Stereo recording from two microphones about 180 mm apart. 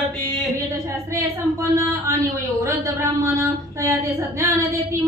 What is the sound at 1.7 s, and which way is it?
A man's voice, 15° right (ahead or behind).